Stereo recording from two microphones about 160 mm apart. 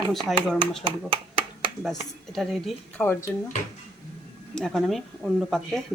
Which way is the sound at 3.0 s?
15° left (ahead or behind).